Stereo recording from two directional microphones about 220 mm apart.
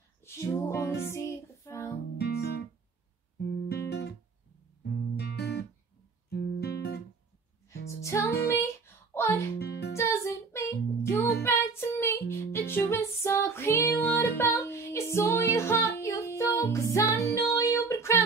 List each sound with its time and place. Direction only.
0.2 s music: 10° left (ahead or behind)
2.1 s guitar: 45° left (ahead or behind)
4.8 s music: 45° left (ahead or behind)
8.0 s music: 15° left (ahead or behind)
8.3 s music: 45° left (ahead or behind)
8.8 s a sound: 10° left (ahead or behind)
9.6 s music: 45° left (ahead or behind)
9.9 s music: 15° left (ahead or behind)